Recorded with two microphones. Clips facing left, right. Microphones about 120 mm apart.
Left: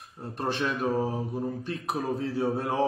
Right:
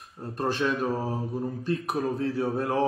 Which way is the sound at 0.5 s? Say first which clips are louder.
Right 2 dB; 25° left (ahead or behind).